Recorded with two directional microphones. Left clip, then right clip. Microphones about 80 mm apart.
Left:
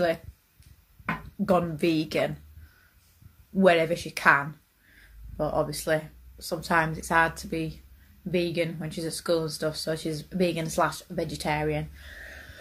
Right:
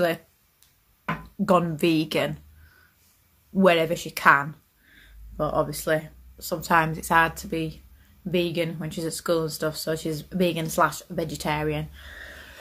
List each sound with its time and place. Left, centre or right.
1.4 s a woman's voice: right
1.7 s a woman's voice: right
3.5 s speech: right